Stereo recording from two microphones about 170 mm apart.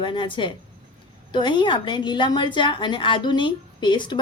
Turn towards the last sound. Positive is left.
turn(degrees=25)  # may be behind; listen again after turning